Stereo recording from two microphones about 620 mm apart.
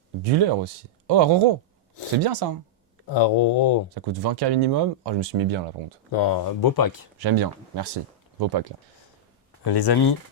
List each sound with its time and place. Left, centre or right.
0.3 s speech: right
3.1 s speech: left
3.9 s speech: right
6.1 s speech: left
7.2 s speech: right
9.6 s speech: left